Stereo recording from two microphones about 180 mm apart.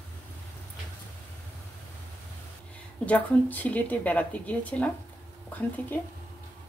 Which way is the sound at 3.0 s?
10° left (ahead or behind).